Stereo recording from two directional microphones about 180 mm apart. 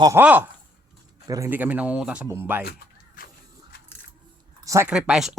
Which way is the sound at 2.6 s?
60° left (ahead or behind).